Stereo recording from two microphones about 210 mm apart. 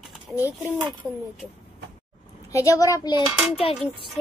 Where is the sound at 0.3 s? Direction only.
5° right (ahead or behind).